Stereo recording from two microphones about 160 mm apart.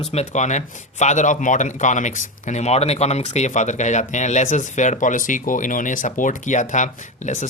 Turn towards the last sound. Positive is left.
turn(degrees=50)  # may be behind; listen again after turning